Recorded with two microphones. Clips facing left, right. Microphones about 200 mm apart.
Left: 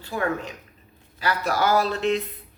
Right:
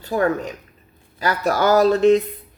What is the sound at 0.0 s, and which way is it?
Speech, 40° right (ahead or behind).